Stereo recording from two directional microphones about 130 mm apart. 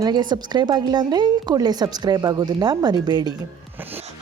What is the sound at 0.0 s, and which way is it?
A woman's voice, 35° right (ahead or behind).